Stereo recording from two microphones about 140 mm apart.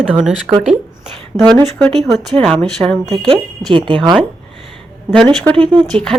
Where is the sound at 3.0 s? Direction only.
35° right (ahead or behind).